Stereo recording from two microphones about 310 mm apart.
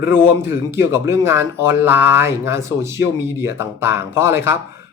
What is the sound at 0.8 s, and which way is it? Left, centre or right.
Speech, centre.